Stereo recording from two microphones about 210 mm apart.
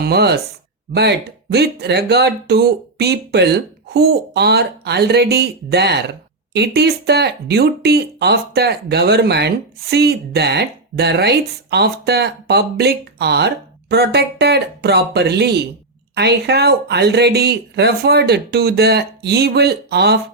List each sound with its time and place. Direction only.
0.0 s speech: 50° right (ahead or behind)